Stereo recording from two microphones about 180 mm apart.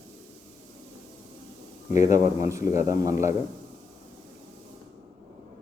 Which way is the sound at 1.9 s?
40° left (ahead or behind).